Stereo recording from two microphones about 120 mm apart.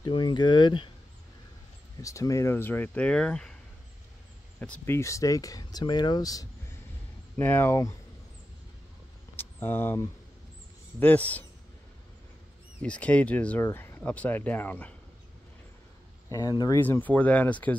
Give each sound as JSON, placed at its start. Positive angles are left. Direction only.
{"t": 0.0, "sound": "speech", "side_deg": 40}
{"t": 2.0, "sound": "speech", "side_deg": 25}
{"t": 4.6, "sound": "speech", "side_deg": 15}
{"t": 7.3, "sound": "speech", "side_deg": 15}
{"t": 9.4, "sound": "speech", "side_deg": 20}
{"t": 12.8, "sound": "speech", "side_deg": 10}
{"t": 13.6, "sound": "speech", "side_deg": 20}
{"t": 16.3, "sound": "speech", "side_deg": 30}
{"t": 17.0, "sound": "speech", "side_deg": 10}